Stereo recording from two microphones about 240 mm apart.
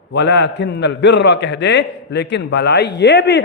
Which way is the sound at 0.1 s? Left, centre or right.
Left.